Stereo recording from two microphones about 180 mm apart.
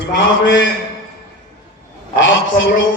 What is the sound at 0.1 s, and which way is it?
Speech, 90° left.